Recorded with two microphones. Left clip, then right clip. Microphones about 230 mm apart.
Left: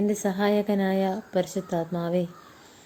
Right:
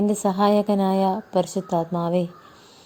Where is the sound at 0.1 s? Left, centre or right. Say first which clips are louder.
Right 5 dB; centre.